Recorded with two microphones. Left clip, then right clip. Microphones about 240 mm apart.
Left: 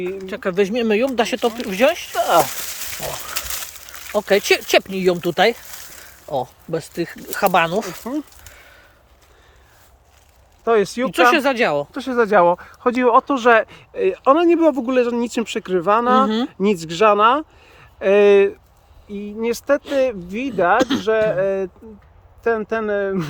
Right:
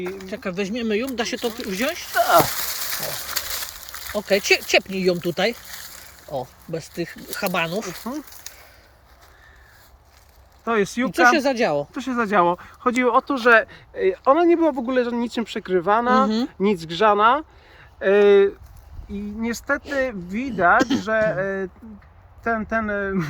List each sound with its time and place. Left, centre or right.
0.3 s speech: centre
2.1 s speech: left
3.3 s speech: centre
10.6 s speech: left
11.1 s speech: centre
11.9 s speech: left